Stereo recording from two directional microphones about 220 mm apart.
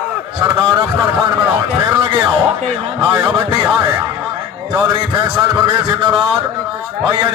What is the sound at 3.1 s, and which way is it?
Speech, 10° right (ahead or behind).